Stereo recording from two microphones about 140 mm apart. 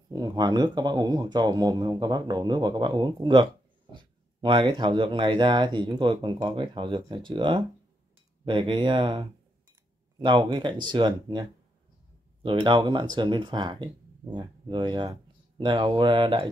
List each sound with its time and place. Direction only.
0.1 s speech: 30° right (ahead or behind)
12.4 s speech: 35° right (ahead or behind)